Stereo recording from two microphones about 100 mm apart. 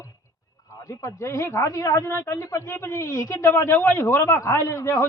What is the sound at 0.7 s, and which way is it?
Speech, 30° left (ahead or behind).